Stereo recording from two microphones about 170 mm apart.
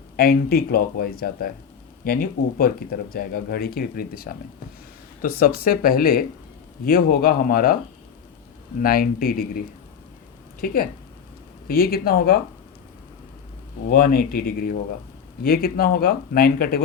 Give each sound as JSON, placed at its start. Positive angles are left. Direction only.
{"t": 0.2, "sound": "speech", "side_deg": 65}
{"t": 8.8, "sound": "speech", "side_deg": 60}
{"t": 11.7, "sound": "speech", "side_deg": 60}
{"t": 13.8, "sound": "speech", "side_deg": 60}